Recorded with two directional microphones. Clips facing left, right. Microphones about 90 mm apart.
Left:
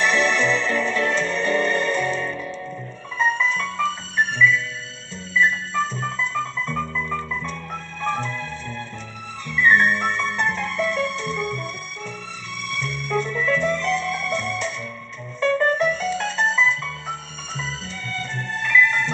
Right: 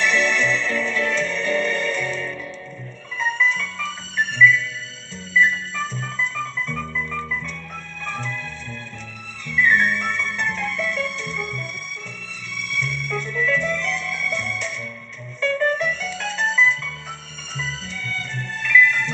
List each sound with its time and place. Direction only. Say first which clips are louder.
0.0 s music: left 1 dB; 40° left (ahead or behind)
9.6 s music: left 2 dB; 35° left (ahead or behind)